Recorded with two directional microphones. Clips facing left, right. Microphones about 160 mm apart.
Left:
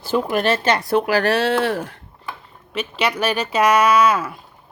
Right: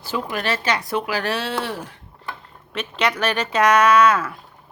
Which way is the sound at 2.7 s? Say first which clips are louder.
Left 1 dB; 5° left (ahead or behind).